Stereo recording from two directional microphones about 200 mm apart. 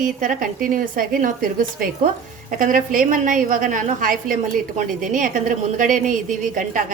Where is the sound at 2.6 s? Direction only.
40° right (ahead or behind).